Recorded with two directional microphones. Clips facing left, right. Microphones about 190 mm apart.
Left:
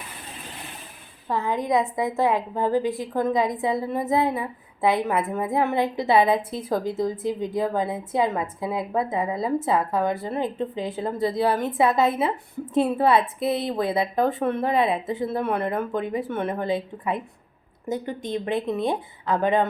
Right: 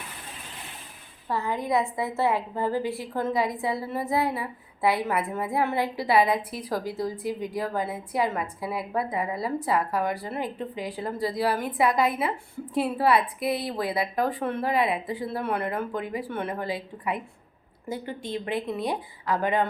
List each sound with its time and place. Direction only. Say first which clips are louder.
1.3 s a woman's voice: left 3 dB; 20° left (ahead or behind)